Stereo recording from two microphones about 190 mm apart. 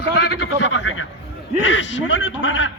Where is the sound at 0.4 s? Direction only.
75° left (ahead or behind).